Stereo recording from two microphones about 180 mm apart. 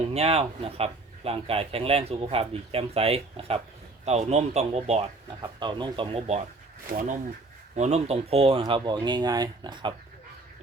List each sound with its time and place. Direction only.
0.0 s a man's voice: 35° right (ahead or behind)
5.4 s speech: 25° right (ahead or behind)
6.8 s speech: 50° right (ahead or behind)
7.8 s speech: 35° right (ahead or behind)